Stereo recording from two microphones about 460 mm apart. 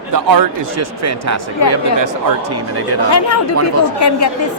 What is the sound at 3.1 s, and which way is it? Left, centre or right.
A woman's voice, left.